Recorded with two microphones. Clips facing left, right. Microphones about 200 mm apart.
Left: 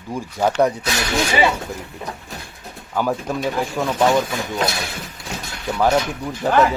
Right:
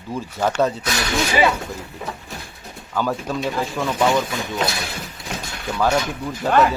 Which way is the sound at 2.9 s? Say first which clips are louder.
Left 1 dB; 15° left (ahead or behind).